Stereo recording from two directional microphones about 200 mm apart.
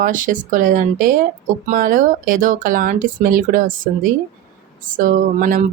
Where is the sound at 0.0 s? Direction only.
40° right (ahead or behind).